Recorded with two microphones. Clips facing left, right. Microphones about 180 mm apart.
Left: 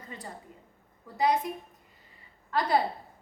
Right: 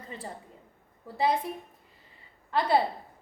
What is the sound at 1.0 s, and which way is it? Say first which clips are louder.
Speech: even; 30° right (ahead or behind).